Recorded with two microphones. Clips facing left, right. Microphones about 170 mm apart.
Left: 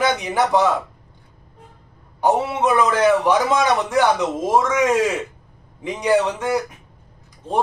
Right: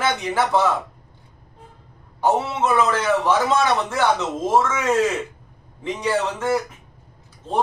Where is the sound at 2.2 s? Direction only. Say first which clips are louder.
Left 2 dB; 15° left (ahead or behind).